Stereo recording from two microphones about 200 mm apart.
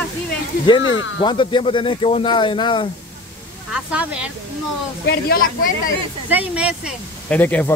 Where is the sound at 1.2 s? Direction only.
25° left (ahead or behind).